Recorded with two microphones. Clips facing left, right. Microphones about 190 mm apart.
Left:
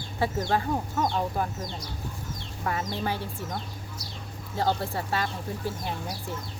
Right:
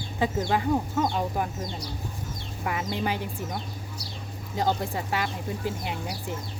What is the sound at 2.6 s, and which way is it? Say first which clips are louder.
Speech: right 1 dB; 15° right (ahead or behind).